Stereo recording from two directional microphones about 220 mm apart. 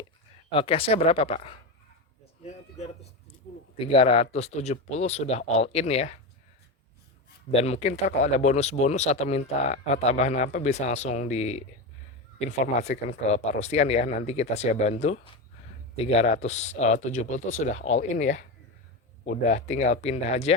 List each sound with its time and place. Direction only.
0.5 s speech: 25° left (ahead or behind)
2.4 s a sound: 30° left (ahead or behind)
3.8 s speech: 25° left (ahead or behind)
7.5 s speech: 30° left (ahead or behind)
19.5 s speech: 30° left (ahead or behind)